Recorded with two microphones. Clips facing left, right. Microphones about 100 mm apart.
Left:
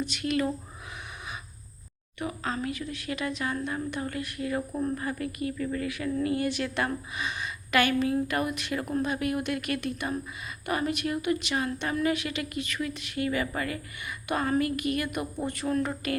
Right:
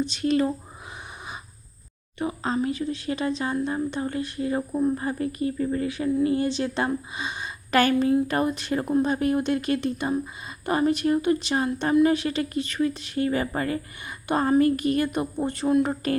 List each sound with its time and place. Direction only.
0.0 s a woman's voice: 30° right (ahead or behind)
2.1 s a woman's voice: 30° right (ahead or behind)
4.7 s speech: 10° right (ahead or behind)
4.9 s a woman's voice: 30° right (ahead or behind)